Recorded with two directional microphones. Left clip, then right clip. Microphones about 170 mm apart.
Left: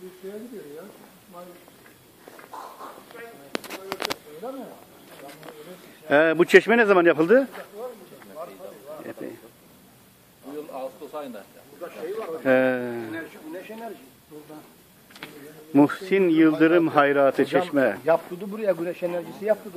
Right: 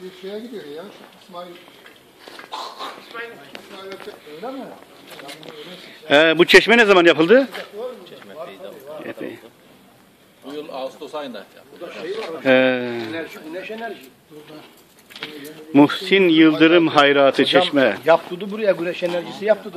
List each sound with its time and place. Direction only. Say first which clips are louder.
3.1 s speech: right 10 dB; 35° right (ahead or behind)
4.4 s speech: right 4 dB; 10° left (ahead or behind)
6.0 s speech: right 5 dB; centre (ahead or behind)
8.6 s a sound: right 5 dB; 5° right (ahead or behind)
10.5 s a man's voice: right 5 dB; 10° right (ahead or behind)
12.4 s speech: right 5 dB; centre (ahead or behind)
15.2 s speech: right 8 dB; 50° left (ahead or behind)
15.7 s speech: right 5 dB; centre (ahead or behind)